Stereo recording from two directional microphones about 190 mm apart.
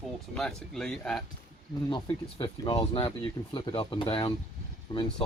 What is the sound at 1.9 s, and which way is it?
Speech, 25° left (ahead or behind).